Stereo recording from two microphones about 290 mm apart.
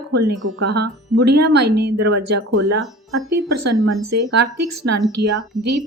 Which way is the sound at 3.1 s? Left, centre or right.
Right.